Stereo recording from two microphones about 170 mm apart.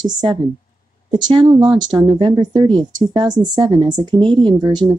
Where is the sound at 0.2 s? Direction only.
30° right (ahead or behind).